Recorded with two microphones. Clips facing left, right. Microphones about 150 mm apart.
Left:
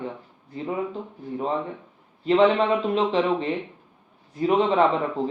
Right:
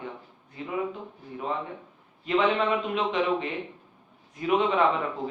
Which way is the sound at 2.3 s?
30° left (ahead or behind).